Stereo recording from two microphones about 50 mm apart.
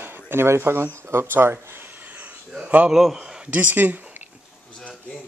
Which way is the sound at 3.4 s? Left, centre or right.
Right.